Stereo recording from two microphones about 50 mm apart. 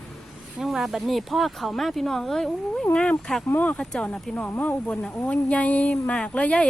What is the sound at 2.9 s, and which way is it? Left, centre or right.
A woman's voice, centre.